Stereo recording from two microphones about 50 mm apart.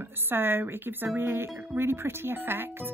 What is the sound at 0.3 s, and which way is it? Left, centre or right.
Speech, right.